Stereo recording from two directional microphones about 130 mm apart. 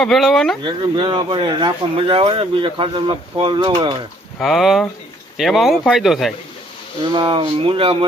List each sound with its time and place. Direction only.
0.0 s speech: centre (ahead or behind)
0.6 s speech: 35° right (ahead or behind)
4.4 s speech: centre (ahead or behind)
7.0 s speech: 35° right (ahead or behind)